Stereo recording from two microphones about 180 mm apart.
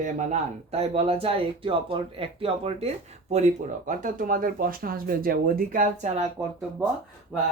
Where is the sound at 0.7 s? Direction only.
35° right (ahead or behind).